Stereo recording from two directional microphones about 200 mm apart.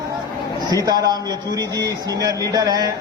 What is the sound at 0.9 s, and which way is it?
A man's voice, 20° right (ahead or behind).